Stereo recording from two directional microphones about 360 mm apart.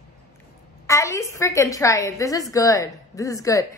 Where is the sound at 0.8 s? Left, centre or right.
Centre.